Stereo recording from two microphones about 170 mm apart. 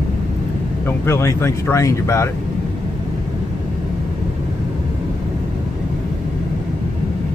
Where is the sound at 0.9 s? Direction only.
15° left (ahead or behind).